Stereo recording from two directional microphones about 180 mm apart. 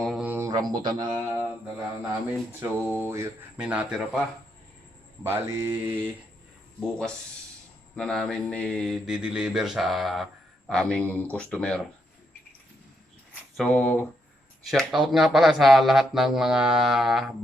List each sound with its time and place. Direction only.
0.0 s mantra: 5° right (ahead or behind); by 0.7 s 20° right (ahead or behind)
0.8 s a man's voice: 20° right (ahead or behind)
2.5 s speech: 10° right (ahead or behind)
5.2 s speech: 15° right (ahead or behind)
6.7 s speech: 5° left (ahead or behind)
13.6 s speech: 5° left (ahead or behind)